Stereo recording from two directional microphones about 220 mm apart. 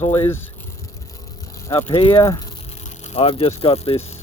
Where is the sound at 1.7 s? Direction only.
25° left (ahead or behind).